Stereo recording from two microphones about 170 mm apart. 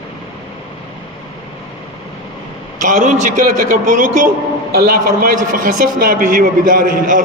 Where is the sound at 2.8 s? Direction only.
50° right (ahead or behind).